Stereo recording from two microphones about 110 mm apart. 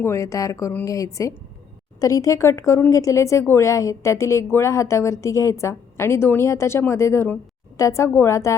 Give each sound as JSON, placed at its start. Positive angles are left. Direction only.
{"t": 0.0, "sound": "a woman's voice", "side_deg": 25}